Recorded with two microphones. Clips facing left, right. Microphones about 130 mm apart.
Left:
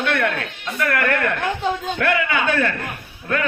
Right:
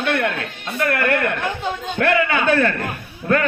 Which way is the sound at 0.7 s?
30° right (ahead or behind).